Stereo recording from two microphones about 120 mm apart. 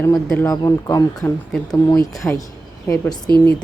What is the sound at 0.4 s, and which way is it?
Speech, 25° left (ahead or behind).